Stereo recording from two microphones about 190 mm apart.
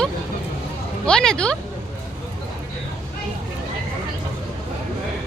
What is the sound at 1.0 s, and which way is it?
Speech, 5° left (ahead or behind).